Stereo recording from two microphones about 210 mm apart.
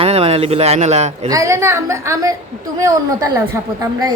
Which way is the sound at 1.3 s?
15° right (ahead or behind).